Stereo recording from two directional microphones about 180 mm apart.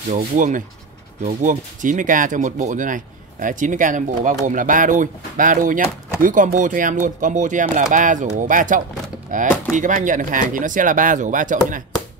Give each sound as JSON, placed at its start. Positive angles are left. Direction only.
{"t": 0.1, "sound": "speech", "side_deg": -45}